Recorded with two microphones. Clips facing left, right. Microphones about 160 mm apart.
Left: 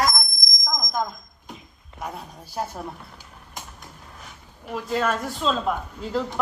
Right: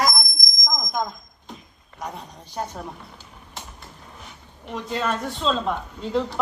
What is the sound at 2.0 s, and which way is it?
Speech, 5° left (ahead or behind).